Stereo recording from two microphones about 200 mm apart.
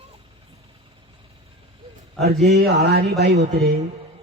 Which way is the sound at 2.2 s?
55° right (ahead or behind).